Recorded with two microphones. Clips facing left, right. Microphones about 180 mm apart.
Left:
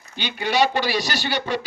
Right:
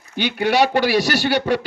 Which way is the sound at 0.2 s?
65° right (ahead or behind).